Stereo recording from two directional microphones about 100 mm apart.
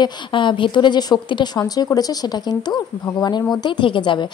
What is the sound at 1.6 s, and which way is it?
A woman's voice, 35° left (ahead or behind).